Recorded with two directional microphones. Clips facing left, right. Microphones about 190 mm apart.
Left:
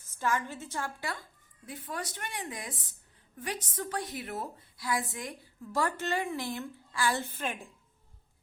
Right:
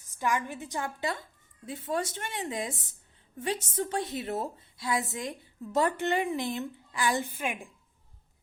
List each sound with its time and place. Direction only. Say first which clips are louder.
0.0 s a woman's voice: right 1 dB; 15° right (ahead or behind)